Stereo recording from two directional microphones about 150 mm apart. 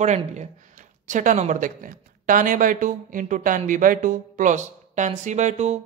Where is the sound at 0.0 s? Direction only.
50° right (ahead or behind).